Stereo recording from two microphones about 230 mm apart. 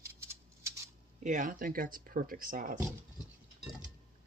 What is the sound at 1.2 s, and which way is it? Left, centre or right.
Speech, right.